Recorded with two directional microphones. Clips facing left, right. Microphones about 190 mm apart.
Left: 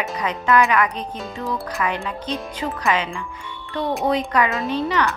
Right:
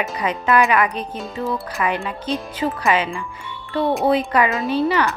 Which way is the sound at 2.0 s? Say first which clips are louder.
Right 2 dB; 10° right (ahead or behind).